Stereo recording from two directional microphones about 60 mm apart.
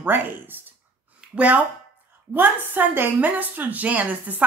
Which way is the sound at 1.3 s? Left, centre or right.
Right.